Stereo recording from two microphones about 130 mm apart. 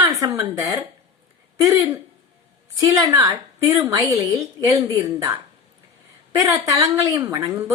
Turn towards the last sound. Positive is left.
turn(degrees=-25)  # may be behind; listen again after turning